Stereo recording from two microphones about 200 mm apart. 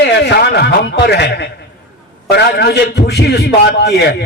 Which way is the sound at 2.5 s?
55° left (ahead or behind).